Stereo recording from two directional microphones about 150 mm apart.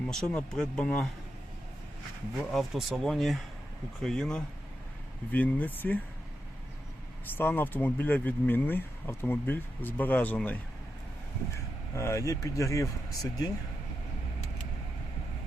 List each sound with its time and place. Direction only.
0.1 s speech: 5° left (ahead or behind)
2.4 s speech: centre (ahead or behind)
7.3 s speech: 15° left (ahead or behind)
11.9 s speech: 20° left (ahead or behind)